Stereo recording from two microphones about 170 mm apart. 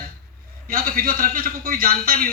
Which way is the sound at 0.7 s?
55° right (ahead or behind).